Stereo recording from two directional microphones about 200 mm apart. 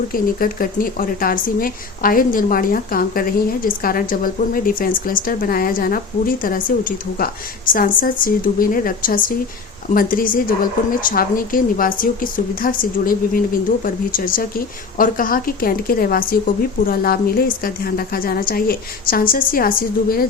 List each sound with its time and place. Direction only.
0.1 s speech: 45° left (ahead or behind)